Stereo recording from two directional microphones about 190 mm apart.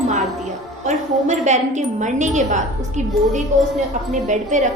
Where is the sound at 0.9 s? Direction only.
40° right (ahead or behind).